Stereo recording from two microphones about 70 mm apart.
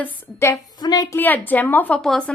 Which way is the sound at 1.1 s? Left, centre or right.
Left.